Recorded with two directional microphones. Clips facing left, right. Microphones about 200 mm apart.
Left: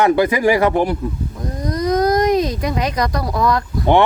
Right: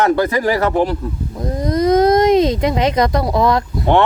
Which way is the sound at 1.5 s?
25° right (ahead or behind).